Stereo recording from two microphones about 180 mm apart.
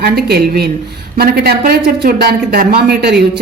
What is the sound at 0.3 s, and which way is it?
Speech, 60° right (ahead or behind).